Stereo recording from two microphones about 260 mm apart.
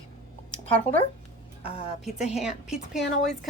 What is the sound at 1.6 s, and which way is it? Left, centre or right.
Speech, left.